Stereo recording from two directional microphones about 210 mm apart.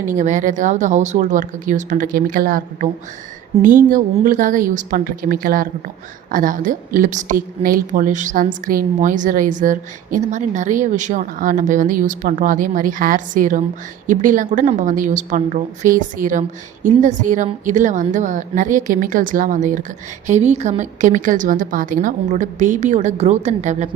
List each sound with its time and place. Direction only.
0.0 s a woman's voice: 35° right (ahead or behind)